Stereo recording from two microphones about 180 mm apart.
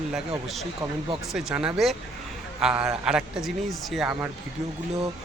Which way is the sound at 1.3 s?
5° right (ahead or behind).